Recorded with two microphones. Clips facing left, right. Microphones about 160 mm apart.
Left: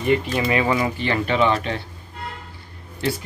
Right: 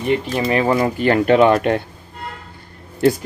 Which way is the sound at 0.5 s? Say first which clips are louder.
Right 5 dB; 45° right (ahead or behind).